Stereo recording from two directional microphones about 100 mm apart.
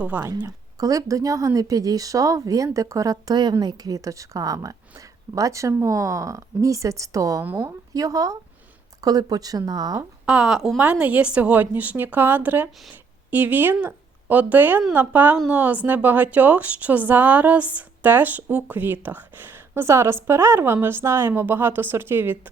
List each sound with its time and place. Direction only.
0.0 s a woman's voice: 20° right (ahead or behind)
0.4 s a woman's voice: 35° right (ahead or behind)
10.2 s a woman's voice: 10° right (ahead or behind)